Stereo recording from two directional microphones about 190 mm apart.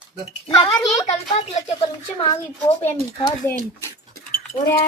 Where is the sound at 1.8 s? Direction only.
20° left (ahead or behind).